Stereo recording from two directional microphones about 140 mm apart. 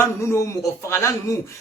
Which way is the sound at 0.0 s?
20° left (ahead or behind).